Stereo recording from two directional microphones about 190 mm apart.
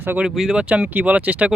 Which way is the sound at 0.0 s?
10° right (ahead or behind).